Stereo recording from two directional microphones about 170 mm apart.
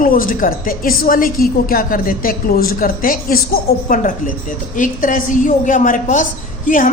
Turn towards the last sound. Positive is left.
turn(degrees=50)  # may be behind; listen again after turning